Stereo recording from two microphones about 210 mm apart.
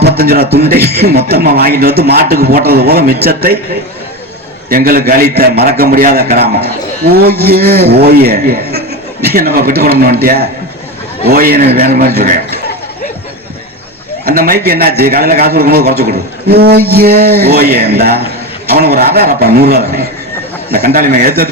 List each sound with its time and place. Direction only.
0.2 s a man's voice: 45° right (ahead or behind)
4.7 s a man's voice: 45° right (ahead or behind)
14.3 s a man's voice: 40° right (ahead or behind)